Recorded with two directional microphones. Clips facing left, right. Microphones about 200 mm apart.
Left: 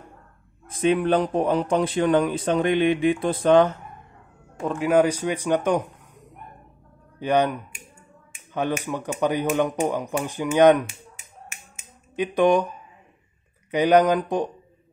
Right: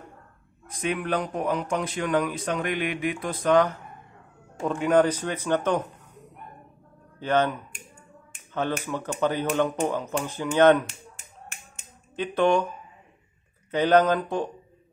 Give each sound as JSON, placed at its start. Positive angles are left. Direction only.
{"t": 0.7, "sound": "speech", "side_deg": 30}
{"t": 4.6, "sound": "speech", "side_deg": 5}
{"t": 7.2, "sound": "speech", "side_deg": 15}
{"t": 12.2, "sound": "speech", "side_deg": 15}
{"t": 13.7, "sound": "speech", "side_deg": 15}